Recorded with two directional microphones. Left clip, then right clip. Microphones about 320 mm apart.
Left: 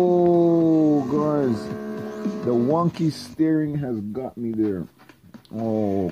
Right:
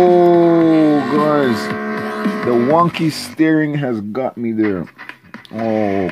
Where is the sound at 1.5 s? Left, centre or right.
Right.